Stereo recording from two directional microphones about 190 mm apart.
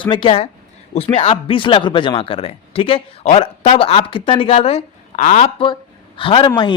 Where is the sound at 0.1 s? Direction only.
25° left (ahead or behind).